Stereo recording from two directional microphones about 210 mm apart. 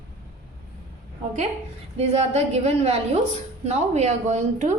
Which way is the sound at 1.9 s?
30° right (ahead or behind).